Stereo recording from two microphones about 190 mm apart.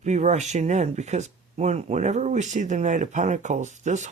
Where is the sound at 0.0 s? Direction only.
40° right (ahead or behind).